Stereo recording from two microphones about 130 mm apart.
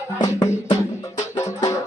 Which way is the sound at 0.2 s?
30° left (ahead or behind).